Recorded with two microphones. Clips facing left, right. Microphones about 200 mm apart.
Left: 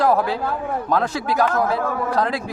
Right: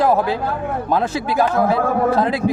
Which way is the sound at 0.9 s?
25° right (ahead or behind).